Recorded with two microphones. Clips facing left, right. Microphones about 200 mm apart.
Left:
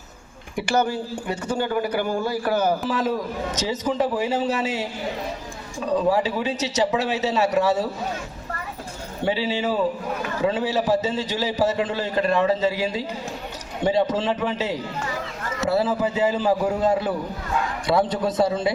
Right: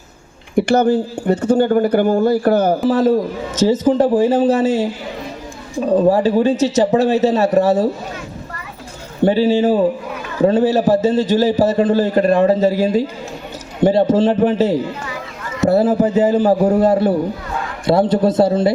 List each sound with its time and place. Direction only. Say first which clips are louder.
0.5 s a man's voice: right 9 dB; 55° right (ahead or behind)
5.9 s a man's voice: right 8 dB; 50° right (ahead or behind)
9.2 s a man's voice: right 10 dB; 45° right (ahead or behind)
14.1 s a man's voice: right 10 dB; 50° right (ahead or behind)
16.9 s a man's voice: right 8 dB; 30° right (ahead or behind)